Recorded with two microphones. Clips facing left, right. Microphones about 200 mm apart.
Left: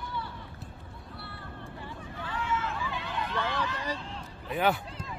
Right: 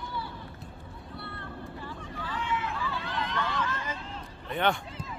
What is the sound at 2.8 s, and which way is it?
Vehicle, 15° left (ahead or behind).